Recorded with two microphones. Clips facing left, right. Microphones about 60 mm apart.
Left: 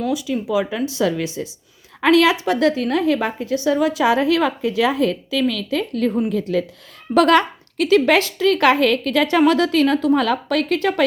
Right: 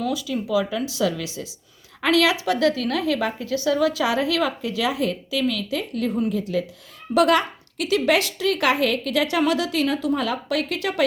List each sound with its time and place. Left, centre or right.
0.1 s a woman's voice: left